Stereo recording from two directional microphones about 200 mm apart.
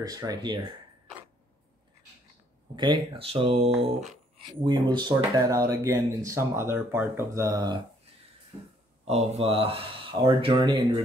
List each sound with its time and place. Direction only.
0.0 s speech: 20° right (ahead or behind)
2.7 s speech: 20° right (ahead or behind)
9.0 s speech: 30° right (ahead or behind)